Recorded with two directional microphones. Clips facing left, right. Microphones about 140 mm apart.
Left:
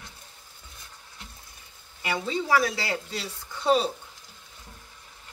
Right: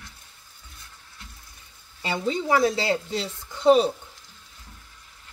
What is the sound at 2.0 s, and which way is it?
Speech, 25° right (ahead or behind).